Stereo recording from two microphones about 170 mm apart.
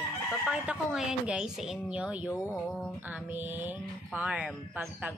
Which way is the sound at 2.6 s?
5° left (ahead or behind).